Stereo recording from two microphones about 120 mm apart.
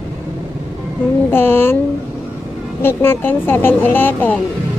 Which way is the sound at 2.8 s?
20° left (ahead or behind).